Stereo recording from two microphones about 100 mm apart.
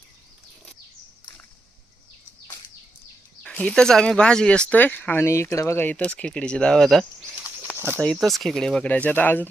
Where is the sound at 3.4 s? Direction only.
10° left (ahead or behind).